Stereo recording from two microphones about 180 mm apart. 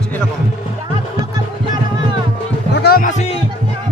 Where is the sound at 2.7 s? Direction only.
60° left (ahead or behind).